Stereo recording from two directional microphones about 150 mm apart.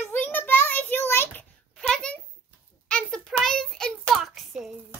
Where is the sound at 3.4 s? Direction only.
5° left (ahead or behind).